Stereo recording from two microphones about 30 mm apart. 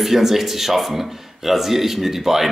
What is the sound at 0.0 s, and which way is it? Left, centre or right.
A man's voice, centre.